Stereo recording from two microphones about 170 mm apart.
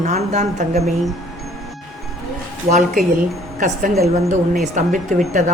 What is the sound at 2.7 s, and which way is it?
A man's voice, 50° right (ahead or behind).